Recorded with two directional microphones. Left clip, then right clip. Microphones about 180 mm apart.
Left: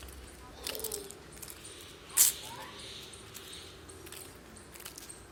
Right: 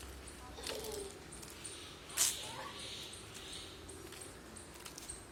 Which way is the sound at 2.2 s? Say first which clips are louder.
Left 6 dB; 70° left (ahead or behind).